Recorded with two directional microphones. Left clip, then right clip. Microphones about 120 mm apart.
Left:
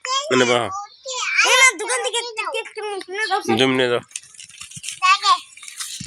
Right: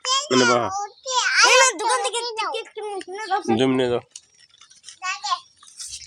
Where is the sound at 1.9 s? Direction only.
45° right (ahead or behind); by 3.0 s 30° right (ahead or behind).